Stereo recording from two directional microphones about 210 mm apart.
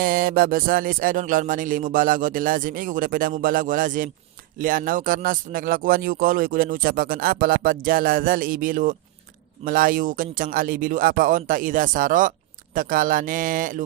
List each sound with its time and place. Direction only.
0.0 s a man's voice: 45° right (ahead or behind)